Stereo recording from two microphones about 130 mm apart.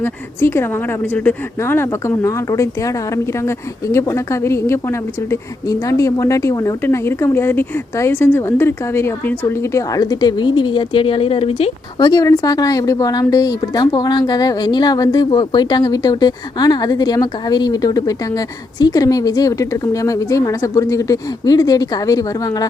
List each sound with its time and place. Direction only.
0.0 s speech: 20° left (ahead or behind); by 11.7 s 45° left (ahead or behind)
11.9 s speech: 30° left (ahead or behind)